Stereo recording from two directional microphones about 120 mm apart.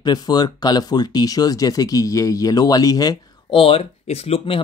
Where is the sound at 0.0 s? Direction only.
35° left (ahead or behind).